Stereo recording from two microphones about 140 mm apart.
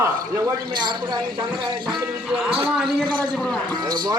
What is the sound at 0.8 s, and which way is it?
Speech, 30° right (ahead or behind).